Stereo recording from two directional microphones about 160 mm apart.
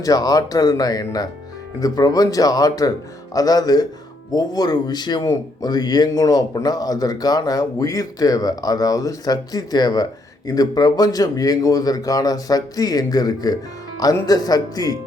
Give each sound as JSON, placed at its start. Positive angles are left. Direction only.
{"t": 0.0, "sound": "speech", "side_deg": 25}